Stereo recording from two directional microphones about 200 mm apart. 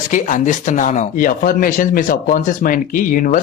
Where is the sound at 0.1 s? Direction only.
40° left (ahead or behind).